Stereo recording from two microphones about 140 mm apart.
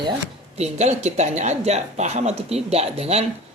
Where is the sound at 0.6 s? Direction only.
50° right (ahead or behind).